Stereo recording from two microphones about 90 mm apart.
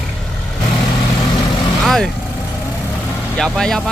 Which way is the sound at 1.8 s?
5° left (ahead or behind).